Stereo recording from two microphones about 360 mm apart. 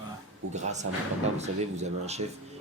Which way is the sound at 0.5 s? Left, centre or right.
Centre.